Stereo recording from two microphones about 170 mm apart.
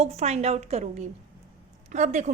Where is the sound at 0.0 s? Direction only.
40° right (ahead or behind).